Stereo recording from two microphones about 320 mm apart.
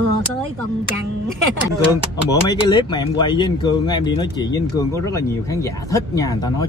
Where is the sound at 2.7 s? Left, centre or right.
Centre.